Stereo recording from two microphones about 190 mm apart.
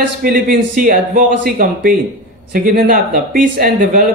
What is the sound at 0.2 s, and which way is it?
A man's voice, 45° right (ahead or behind).